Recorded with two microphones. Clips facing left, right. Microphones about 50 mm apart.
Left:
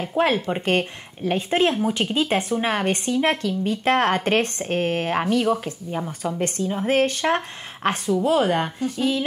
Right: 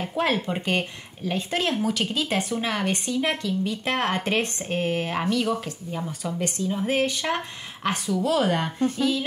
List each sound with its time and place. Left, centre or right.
0.1 s speech: left